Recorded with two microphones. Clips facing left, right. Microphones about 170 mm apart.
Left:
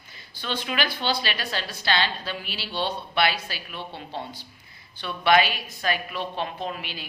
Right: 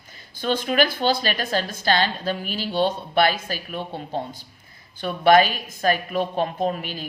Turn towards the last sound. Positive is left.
turn(degrees=-45)  # may be behind; listen again after turning